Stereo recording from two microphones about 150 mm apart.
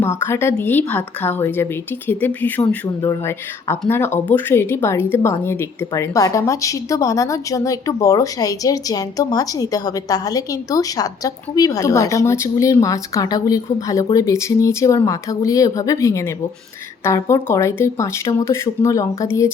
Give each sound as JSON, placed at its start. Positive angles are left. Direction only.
{"t": 0.0, "sound": "a woman's voice", "side_deg": 15}